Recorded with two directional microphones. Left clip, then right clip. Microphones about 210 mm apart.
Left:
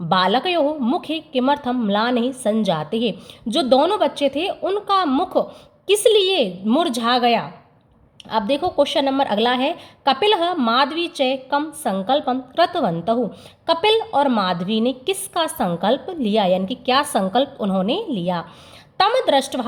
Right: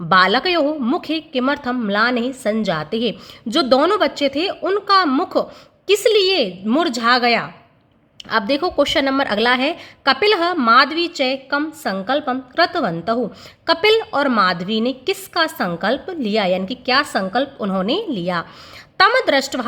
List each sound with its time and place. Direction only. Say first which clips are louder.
0.1 s a woman's voice: right 4 dB; 10° right (ahead or behind)
10.8 s a woman's voice: right 3 dB; 40° right (ahead or behind)
11.2 s a woman's voice: left 2 dB; 10° right (ahead or behind)
19.6 s speech: right 2 dB; 15° right (ahead or behind)